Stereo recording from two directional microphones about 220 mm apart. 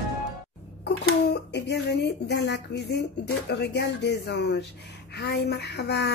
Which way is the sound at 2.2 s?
50° left (ahead or behind).